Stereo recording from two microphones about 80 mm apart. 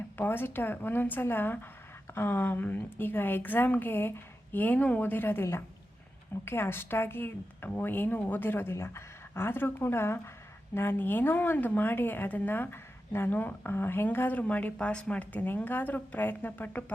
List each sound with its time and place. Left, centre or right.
0.2 s a woman's voice: left